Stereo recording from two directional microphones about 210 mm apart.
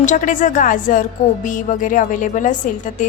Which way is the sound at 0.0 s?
35° left (ahead or behind).